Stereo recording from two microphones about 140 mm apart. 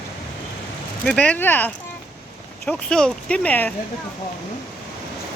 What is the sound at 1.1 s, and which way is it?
Speech, 10° left (ahead or behind).